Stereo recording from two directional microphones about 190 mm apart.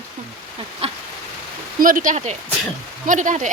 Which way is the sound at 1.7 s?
45° right (ahead or behind).